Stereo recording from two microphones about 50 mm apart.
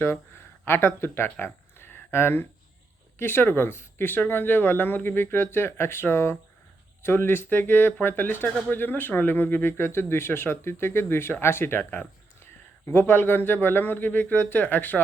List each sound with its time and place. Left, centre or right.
0.6 s speech: left
11.8 s speech: left
12.8 s speech: left